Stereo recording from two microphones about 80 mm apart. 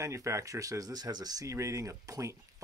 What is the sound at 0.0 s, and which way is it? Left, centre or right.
Speech, right.